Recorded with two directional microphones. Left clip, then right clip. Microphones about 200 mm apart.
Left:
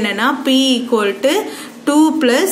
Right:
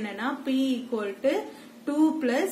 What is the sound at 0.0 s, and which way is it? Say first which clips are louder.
A woman's voice: left 15 dB; 25° left (ahead or behind).